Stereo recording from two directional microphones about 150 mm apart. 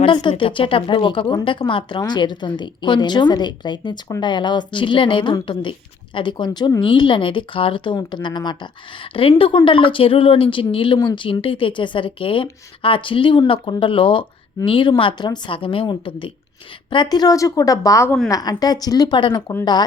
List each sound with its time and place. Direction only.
0.0 s a woman's voice: 30° left (ahead or behind)